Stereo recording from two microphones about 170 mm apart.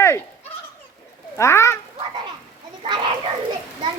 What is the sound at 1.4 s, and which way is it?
Speech, 15° left (ahead or behind).